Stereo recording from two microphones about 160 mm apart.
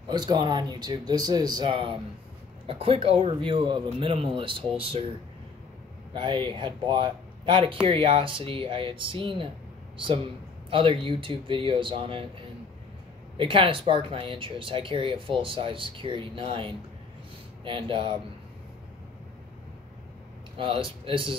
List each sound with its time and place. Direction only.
0.1 s speech: 25° right (ahead or behind)
6.1 s speech: 30° right (ahead or behind)
20.5 s speech: 35° right (ahead or behind)